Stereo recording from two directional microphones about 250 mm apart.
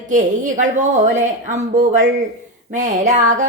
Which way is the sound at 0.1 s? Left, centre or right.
Right.